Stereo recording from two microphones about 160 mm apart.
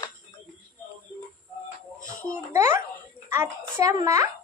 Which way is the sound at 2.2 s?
15° right (ahead or behind).